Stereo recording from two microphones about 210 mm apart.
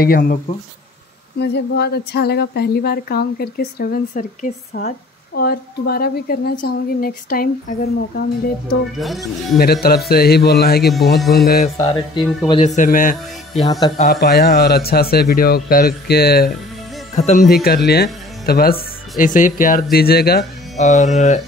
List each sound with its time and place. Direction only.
0.0 s speech: 45° left (ahead or behind)
1.4 s speech: 50° left (ahead or behind)
8.9 s speech: centre (ahead or behind)
9.6 s speech: 45° left (ahead or behind)
11.8 s a man's voice: 20° left (ahead or behind); by 13.1 s 40° left (ahead or behind)
13.7 s speech: 20° left (ahead or behind)
14.2 s speech: 50° left (ahead or behind)
17.1 s a man's voice: 35° left (ahead or behind)
17.5 s speech: 45° left (ahead or behind)
20.7 s a man's voice: 35° left (ahead or behind)